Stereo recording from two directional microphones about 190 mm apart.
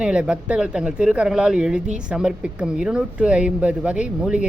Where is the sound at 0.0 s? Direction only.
5° right (ahead or behind).